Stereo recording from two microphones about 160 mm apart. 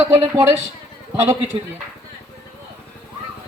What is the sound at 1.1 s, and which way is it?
Speech, 20° right (ahead or behind).